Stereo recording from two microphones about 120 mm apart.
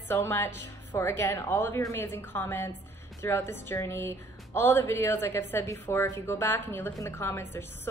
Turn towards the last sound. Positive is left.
turn(degrees=20)  # may be behind; listen again after turning